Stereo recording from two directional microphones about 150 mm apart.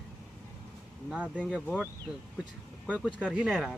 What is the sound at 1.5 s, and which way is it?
Speech, centre (ahead or behind).